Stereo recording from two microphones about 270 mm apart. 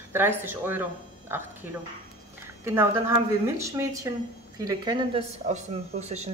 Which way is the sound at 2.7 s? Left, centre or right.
Centre.